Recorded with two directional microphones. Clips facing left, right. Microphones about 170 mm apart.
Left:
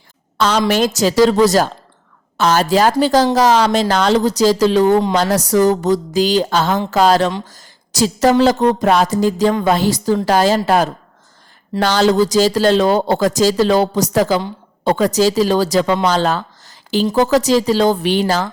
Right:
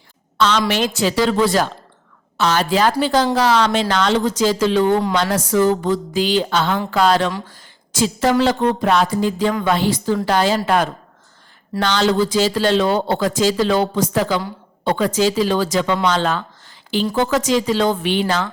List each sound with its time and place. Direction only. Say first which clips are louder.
0.3 s a woman's voice: left 3 dB; 40° left (ahead or behind)